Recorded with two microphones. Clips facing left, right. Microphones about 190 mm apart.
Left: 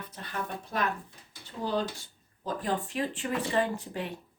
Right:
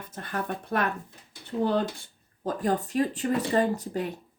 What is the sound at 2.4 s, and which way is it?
Speech, 45° right (ahead or behind).